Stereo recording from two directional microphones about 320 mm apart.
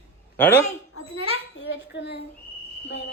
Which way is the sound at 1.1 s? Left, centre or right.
Centre.